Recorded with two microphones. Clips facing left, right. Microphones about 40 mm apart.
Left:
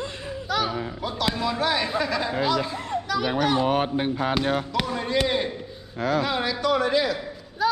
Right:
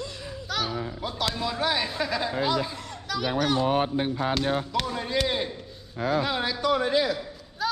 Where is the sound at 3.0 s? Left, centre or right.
Centre.